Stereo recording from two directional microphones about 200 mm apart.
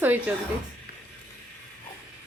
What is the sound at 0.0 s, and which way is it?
Speech, 10° right (ahead or behind).